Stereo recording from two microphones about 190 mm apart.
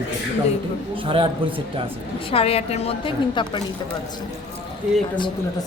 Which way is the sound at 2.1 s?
30° left (ahead or behind).